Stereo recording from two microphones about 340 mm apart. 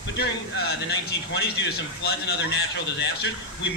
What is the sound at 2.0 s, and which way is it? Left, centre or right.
Speech, left.